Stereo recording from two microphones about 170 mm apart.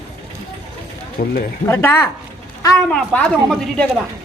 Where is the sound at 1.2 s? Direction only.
60° left (ahead or behind).